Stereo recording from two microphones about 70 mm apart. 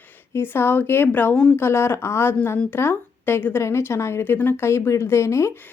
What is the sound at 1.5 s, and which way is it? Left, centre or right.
Speech, left.